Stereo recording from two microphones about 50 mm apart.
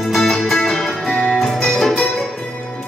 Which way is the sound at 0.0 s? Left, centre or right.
Centre.